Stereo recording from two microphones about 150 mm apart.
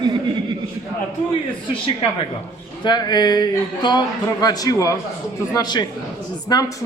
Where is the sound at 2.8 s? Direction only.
30° left (ahead or behind).